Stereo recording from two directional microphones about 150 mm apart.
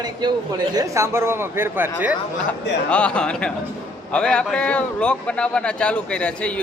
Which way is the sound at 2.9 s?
10° left (ahead or behind).